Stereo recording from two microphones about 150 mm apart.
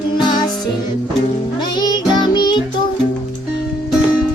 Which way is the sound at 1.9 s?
30° left (ahead or behind).